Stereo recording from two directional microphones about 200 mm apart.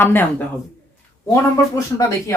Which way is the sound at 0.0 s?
10° left (ahead or behind).